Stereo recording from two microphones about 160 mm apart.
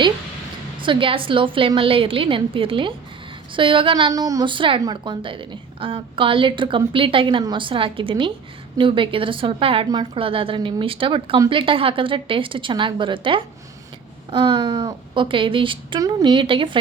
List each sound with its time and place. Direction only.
0.8 s a woman's voice: 30° right (ahead or behind)